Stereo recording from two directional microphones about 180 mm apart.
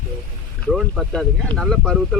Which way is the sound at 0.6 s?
5° left (ahead or behind).